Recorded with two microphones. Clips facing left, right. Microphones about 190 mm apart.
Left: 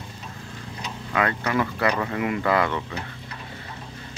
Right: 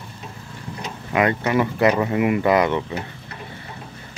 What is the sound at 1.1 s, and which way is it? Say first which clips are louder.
Speech: right 5 dB; 20° right (ahead or behind).